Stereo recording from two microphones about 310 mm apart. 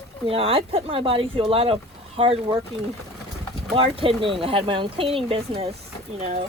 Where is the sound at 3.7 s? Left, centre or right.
Centre.